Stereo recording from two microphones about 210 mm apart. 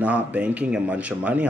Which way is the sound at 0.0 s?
5° right (ahead or behind).